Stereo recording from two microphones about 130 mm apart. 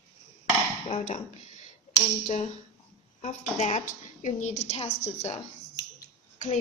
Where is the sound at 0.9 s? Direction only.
70° left (ahead or behind).